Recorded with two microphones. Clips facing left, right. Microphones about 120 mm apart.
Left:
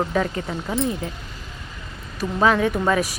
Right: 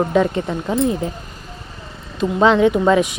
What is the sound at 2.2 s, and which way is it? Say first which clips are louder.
Speech: right 5 dB; 25° right (ahead or behind).